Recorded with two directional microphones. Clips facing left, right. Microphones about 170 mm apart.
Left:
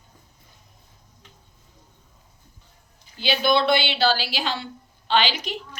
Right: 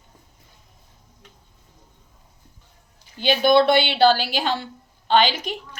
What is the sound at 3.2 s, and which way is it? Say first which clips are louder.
A woman's voice: right 5 dB; 50° right (ahead or behind).